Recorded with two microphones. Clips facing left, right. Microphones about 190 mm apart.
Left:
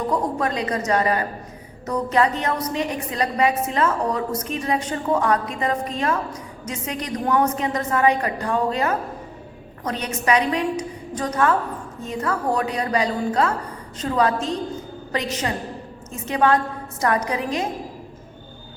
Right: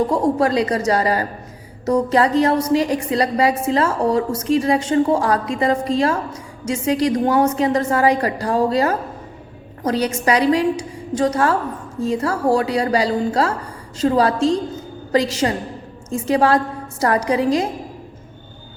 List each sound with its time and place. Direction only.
0.1 s a woman's voice: 30° right (ahead or behind)